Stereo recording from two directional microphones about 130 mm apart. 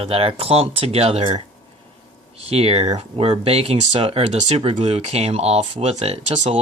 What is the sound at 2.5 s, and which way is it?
Speech, 50° right (ahead or behind).